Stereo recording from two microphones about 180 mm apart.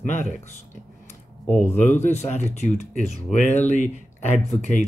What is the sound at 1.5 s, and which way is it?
Speech, 10° left (ahead or behind).